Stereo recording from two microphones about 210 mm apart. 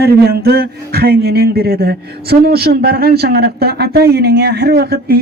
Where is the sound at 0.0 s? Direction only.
45° right (ahead or behind).